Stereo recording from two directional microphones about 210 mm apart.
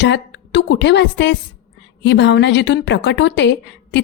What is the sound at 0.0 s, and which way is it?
A woman's voice, 60° left (ahead or behind).